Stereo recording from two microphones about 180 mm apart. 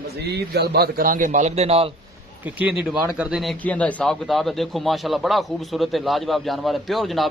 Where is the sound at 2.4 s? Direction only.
10° right (ahead or behind).